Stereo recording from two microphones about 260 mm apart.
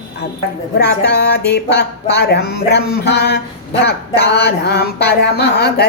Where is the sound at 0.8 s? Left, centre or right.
Left.